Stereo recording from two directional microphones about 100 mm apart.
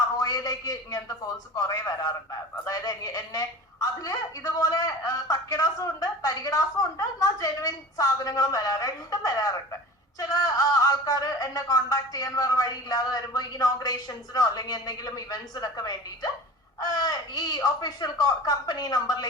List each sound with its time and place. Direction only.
0.2 s a woman's voice: 40° left (ahead or behind)